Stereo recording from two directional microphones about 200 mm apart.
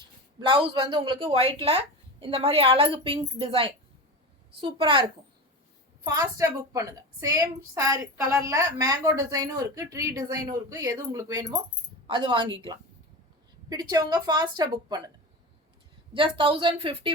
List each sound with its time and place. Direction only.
0.3 s a woman's voice: 25° right (ahead or behind)
13.7 s a woman's voice: 20° right (ahead or behind)
16.1 s a woman's voice: 25° right (ahead or behind)